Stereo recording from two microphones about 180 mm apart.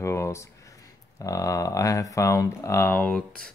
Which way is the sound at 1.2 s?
20° left (ahead or behind).